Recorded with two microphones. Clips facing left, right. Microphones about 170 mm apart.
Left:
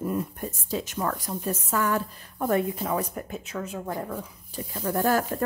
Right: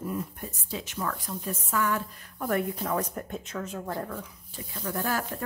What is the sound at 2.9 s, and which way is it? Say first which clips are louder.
Speech: left 1 dB; 10° left (ahead or behind).